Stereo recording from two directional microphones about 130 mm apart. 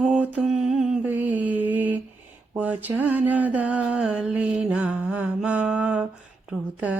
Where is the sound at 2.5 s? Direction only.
10° right (ahead or behind).